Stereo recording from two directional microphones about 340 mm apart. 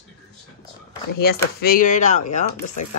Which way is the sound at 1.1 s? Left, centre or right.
Left.